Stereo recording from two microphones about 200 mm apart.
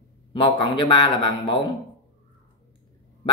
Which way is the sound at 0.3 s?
25° left (ahead or behind).